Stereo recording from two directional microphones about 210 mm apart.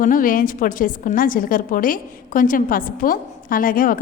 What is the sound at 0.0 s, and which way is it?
A woman's voice, 40° left (ahead or behind).